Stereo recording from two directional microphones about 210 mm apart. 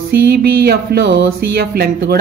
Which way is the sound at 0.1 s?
50° right (ahead or behind).